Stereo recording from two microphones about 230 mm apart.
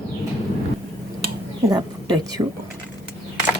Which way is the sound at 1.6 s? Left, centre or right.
Centre.